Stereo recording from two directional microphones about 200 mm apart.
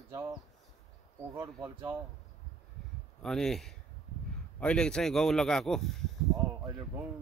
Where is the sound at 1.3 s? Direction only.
10° right (ahead or behind).